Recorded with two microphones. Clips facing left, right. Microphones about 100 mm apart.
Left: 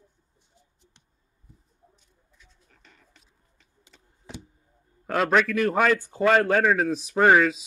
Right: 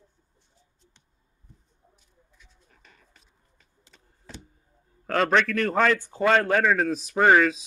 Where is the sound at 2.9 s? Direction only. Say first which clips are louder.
Even; 45° right (ahead or behind).